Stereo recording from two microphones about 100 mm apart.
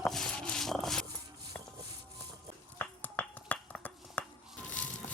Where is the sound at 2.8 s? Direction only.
15° left (ahead or behind).